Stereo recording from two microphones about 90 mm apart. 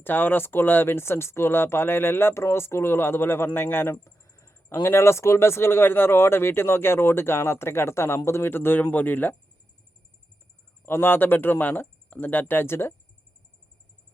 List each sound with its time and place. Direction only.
0.0 s speech: 20° left (ahead or behind)
3.9 s speech: 35° left (ahead or behind); by 9.3 s 20° left (ahead or behind)
10.8 s speech: 25° left (ahead or behind)